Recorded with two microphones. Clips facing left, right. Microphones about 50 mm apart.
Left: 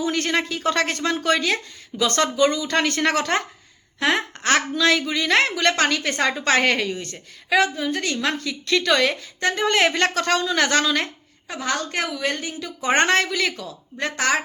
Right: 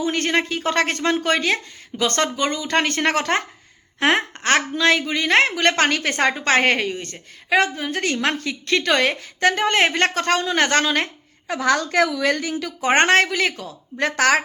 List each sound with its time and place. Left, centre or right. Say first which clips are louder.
0.0 s a woman's voice: right 2 dB; right
7.9 s a woman's voice: right 2 dB; right
9.4 s speech: right 4 dB; right
9.6 s a woman's voice: right 1 dB; right
11.4 s a woman's voice: right 6 dB; right
12.8 s a woman's voice: right 3 dB; right
14.0 s speech: right 4 dB; right